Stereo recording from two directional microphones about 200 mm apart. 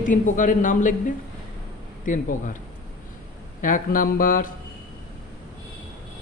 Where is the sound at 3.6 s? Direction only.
40° left (ahead or behind).